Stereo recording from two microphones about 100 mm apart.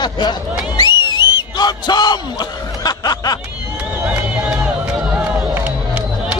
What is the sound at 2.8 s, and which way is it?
Snicker, 40° left (ahead or behind).